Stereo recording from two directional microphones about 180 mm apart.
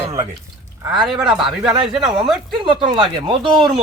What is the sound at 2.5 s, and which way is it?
Speech, 25° right (ahead or behind).